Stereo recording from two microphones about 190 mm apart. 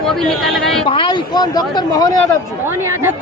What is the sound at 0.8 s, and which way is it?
Speech, 25° left (ahead or behind).